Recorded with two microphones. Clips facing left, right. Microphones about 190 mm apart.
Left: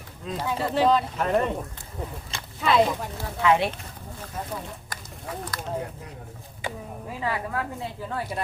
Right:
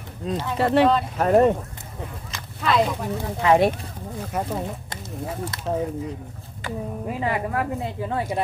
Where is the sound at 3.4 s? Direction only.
40° right (ahead or behind).